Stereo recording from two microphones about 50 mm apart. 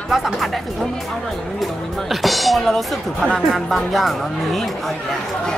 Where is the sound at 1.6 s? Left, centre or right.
Centre.